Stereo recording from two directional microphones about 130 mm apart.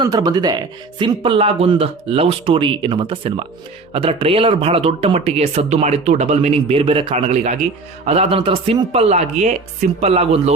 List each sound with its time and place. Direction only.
0.0 s speech: 30° right (ahead or behind); by 10.5 s 50° right (ahead or behind)